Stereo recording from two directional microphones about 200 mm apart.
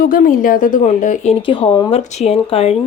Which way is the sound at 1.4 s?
25° left (ahead or behind).